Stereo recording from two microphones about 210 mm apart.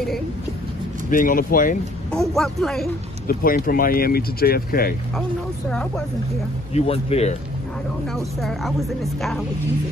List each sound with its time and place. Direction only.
1.1 s speech: 40° left (ahead or behind)
2.1 s a woman's voice: centre (ahead or behind)
3.3 s speech: 45° left (ahead or behind)
5.7 s a woman's voice: 5° left (ahead or behind)
6.7 s speech: 30° left (ahead or behind)
8.4 s a woman's voice: centre (ahead or behind)